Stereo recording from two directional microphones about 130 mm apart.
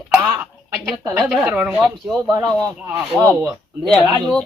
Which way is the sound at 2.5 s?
25° right (ahead or behind).